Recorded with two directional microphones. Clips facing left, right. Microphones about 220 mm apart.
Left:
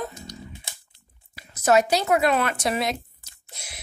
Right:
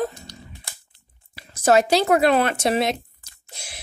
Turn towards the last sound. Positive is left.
turn(degrees=-30)  # may be behind; listen again after turning